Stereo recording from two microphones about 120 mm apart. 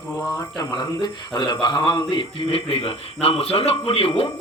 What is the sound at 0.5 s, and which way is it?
A man's voice, 35° left (ahead or behind).